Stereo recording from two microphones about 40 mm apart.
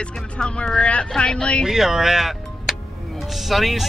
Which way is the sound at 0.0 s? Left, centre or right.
Left.